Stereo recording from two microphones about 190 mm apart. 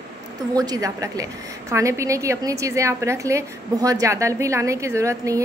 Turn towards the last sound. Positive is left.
turn(degrees=-15)  # may be behind; listen again after turning